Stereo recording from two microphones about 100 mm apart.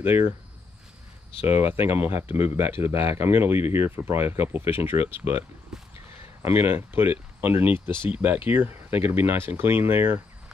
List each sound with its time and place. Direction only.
0.0 s speech: 20° right (ahead or behind)
1.4 s speech: 25° right (ahead or behind)
5.7 s a sound: 5° right (ahead or behind)
6.4 s speech: 20° right (ahead or behind)